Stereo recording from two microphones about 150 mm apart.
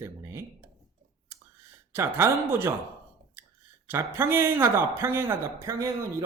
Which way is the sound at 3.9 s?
15° right (ahead or behind).